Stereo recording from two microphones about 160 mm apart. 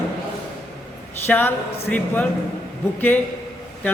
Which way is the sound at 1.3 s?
10° left (ahead or behind).